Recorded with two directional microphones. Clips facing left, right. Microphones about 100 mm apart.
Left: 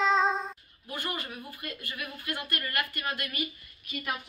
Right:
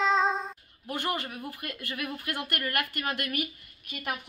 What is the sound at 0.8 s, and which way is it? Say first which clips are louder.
Speech: right 4 dB; 65° right (ahead or behind).